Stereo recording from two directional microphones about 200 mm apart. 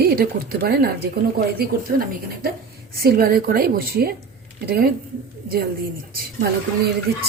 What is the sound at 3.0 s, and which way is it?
A woman's voice, 50° right (ahead or behind).